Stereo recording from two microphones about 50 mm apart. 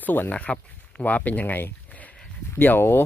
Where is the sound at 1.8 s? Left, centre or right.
Left.